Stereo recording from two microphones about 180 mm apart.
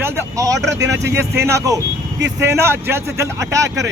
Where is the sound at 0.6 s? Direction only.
15° right (ahead or behind).